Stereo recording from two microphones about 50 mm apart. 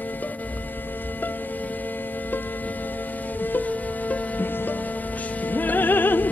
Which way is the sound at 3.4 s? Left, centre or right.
Left.